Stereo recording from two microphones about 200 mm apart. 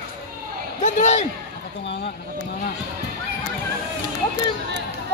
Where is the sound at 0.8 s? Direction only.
35° left (ahead or behind).